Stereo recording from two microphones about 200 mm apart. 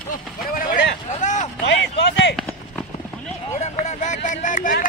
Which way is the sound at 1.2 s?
40° left (ahead or behind).